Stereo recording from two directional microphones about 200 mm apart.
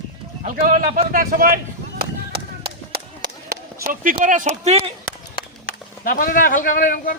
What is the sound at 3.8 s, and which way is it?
Speech, 45° right (ahead or behind).